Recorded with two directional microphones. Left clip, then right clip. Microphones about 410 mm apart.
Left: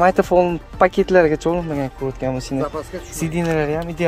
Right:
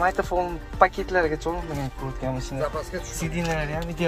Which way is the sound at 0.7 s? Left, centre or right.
Left.